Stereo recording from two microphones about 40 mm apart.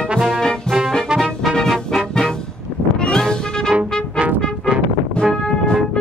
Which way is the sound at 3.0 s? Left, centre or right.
Centre.